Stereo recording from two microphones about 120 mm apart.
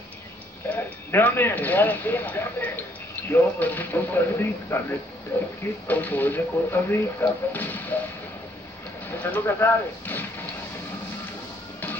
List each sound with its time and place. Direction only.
0.7 s speech: 15° left (ahead or behind)
5.9 s speech: 15° left (ahead or behind)
9.1 s speech: 15° left (ahead or behind)